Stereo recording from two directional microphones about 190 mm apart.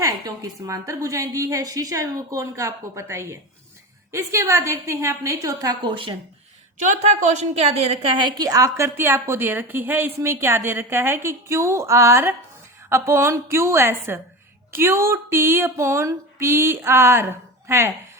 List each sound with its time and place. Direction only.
0.0 s a woman's voice: 20° right (ahead or behind)
6.7 s a woman's voice: 40° right (ahead or behind); by 17.9 s 15° right (ahead or behind)